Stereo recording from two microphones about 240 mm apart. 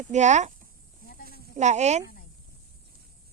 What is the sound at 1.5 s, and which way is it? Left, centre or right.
Speech, right.